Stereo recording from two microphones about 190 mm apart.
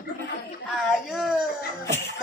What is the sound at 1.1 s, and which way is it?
Speech, centre (ahead or behind).